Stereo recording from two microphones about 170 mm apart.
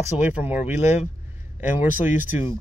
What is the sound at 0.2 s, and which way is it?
Speech, 10° right (ahead or behind).